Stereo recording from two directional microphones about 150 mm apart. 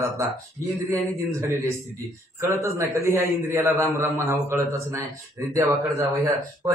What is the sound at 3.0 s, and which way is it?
A man's voice, 20° right (ahead or behind).